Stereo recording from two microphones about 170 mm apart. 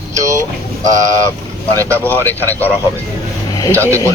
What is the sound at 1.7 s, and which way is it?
Speech, 15° right (ahead or behind).